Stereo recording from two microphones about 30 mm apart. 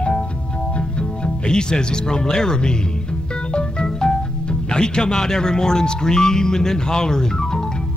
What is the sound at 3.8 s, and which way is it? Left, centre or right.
Speech, left.